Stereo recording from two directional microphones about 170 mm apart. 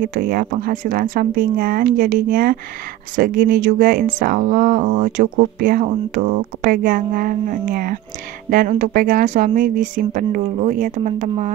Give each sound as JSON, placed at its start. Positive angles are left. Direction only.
{"t": 0.0, "sound": "speech", "side_deg": -55}